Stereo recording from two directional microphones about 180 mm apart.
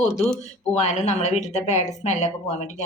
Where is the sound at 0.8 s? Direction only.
40° left (ahead or behind).